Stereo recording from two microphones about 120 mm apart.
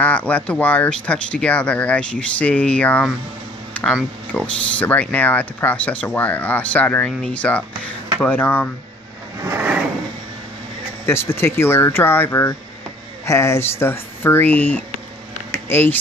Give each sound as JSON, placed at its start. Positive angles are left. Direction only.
{"t": 0.0, "sound": "speech", "side_deg": 10}
{"t": 9.4, "sound": "a sound", "side_deg": -20}
{"t": 11.1, "sound": "speech", "side_deg": 20}